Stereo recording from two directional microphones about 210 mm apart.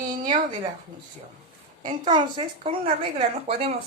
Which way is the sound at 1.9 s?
20° right (ahead or behind).